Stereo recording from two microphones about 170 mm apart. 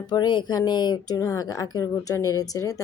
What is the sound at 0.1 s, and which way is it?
Speech, 25° left (ahead or behind).